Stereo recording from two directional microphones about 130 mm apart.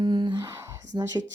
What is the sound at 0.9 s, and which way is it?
Speech, 30° right (ahead or behind).